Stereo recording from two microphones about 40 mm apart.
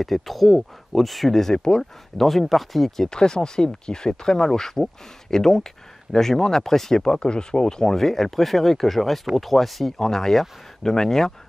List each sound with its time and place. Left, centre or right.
0.0 s speech: centre
2.1 s speech: centre
3.1 s speech: centre